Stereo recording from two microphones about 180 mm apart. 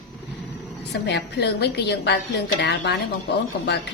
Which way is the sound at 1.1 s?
65° left (ahead or behind).